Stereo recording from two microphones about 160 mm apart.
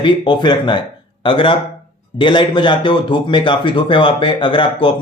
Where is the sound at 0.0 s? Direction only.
30° left (ahead or behind).